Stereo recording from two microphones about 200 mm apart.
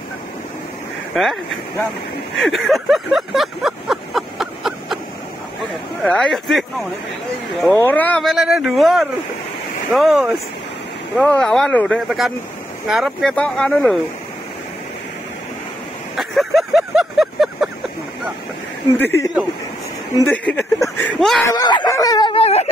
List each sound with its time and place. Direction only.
1.1 s speech: centre (ahead or behind)
2.3 s a sound: centre (ahead or behind)
6.0 s speech: 5° left (ahead or behind)
16.2 s vehicle: centre (ahead or behind)
18.9 s speech: 10° left (ahead or behind)
21.5 s a sound: 20° left (ahead or behind)